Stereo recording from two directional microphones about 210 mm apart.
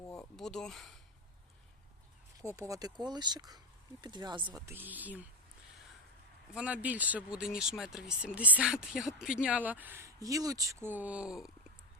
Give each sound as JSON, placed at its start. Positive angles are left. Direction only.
{"t": 0.0, "sound": "a sound", "side_deg": 5}
{"t": 2.4, "sound": "speech", "side_deg": -15}
{"t": 6.5, "sound": "speech", "side_deg": -5}